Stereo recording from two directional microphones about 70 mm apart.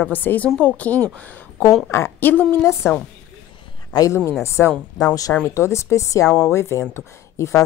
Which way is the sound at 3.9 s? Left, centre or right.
Left.